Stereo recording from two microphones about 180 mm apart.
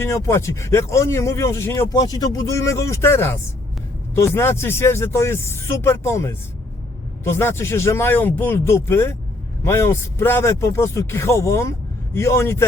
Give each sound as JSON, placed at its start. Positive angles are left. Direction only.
{"t": 0.0, "sound": "speech", "side_deg": 15}